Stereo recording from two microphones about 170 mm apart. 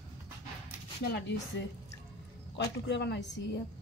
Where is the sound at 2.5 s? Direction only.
90° left.